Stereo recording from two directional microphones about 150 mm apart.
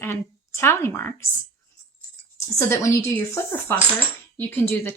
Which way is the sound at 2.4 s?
20° left (ahead or behind).